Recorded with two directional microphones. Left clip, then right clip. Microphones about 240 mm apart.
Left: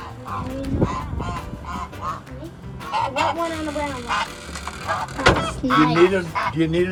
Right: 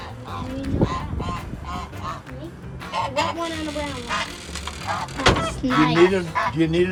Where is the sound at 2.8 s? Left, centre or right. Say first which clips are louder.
Left 2 dB; centre.